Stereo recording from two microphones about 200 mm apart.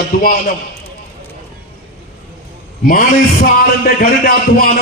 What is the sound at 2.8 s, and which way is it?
A man's voice, 45° left (ahead or behind).